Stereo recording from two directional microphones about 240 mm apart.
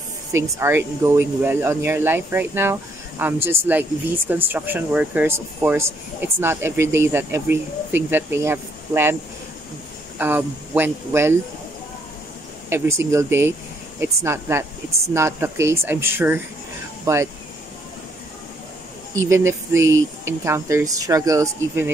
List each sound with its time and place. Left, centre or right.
0.3 s speech: centre
10.1 s speech: centre
12.6 s speech: centre
19.1 s speech: centre
19.8 s speech: right
20.2 s speech: centre